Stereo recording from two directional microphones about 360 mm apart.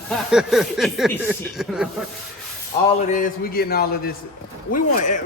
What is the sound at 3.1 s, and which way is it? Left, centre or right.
Speech, left.